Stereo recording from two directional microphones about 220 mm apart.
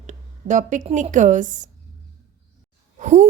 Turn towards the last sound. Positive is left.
turn(degrees=-35)  # may be behind; listen again after turning